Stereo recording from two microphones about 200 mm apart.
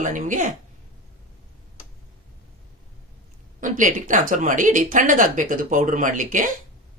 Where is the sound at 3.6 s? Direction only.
40° right (ahead or behind).